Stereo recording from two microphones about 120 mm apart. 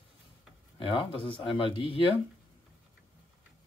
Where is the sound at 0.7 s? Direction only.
45° left (ahead or behind).